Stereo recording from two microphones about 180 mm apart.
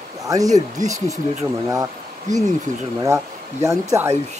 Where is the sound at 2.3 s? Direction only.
45° right (ahead or behind).